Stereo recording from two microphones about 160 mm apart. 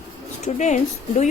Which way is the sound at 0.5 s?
50° left (ahead or behind).